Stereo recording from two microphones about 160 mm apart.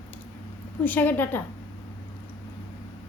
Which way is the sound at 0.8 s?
10° left (ahead or behind).